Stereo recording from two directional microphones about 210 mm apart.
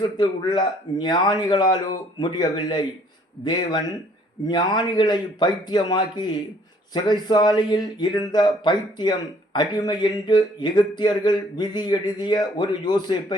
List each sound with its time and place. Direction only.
0.0 s speech: 20° left (ahead or behind)